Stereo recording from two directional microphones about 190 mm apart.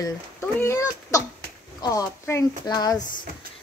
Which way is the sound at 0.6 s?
15° left (ahead or behind).